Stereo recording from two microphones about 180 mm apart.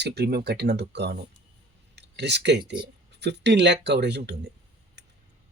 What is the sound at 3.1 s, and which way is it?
Speech, 70° right (ahead or behind).